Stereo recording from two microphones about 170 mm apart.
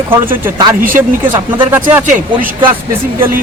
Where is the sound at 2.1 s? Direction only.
50° right (ahead or behind).